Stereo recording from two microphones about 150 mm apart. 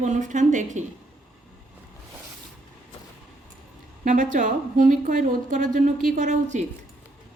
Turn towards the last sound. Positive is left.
turn(degrees=-55)  # may be behind; listen again after turning